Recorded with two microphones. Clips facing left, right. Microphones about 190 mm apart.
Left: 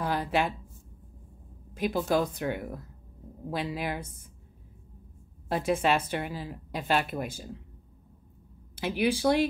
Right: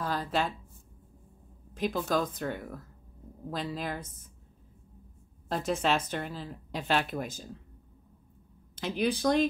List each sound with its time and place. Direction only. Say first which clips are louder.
0.0 s speech: left 3 dB; 15° left (ahead or behind)
1.7 s a sound: left 1 dB; 10° left (ahead or behind)
2.0 s speech: left 4 dB; 10° left (ahead or behind)
5.5 s speech: left 3 dB; 10° left (ahead or behind)
8.7 s speech: left 2 dB; 10° left (ahead or behind)